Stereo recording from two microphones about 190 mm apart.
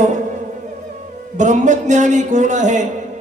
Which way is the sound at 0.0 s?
40° right (ahead or behind).